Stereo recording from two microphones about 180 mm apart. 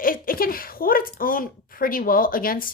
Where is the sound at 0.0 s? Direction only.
50° left (ahead or behind).